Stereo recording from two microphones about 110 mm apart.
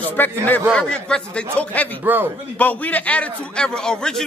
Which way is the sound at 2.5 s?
15° left (ahead or behind).